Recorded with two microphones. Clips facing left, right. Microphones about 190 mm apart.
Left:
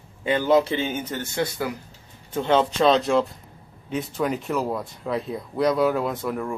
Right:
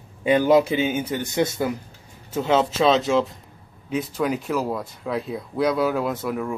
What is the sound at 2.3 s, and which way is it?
Speech, 5° right (ahead or behind).